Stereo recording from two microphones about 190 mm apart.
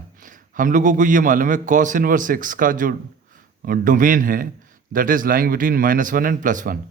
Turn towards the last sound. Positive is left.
turn(degrees=-45)  # may be behind; listen again after turning